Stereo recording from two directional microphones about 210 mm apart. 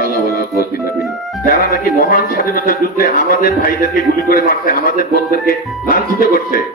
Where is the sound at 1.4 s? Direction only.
45° left (ahead or behind).